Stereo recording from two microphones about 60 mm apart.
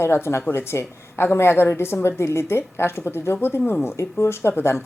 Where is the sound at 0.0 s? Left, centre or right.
Left.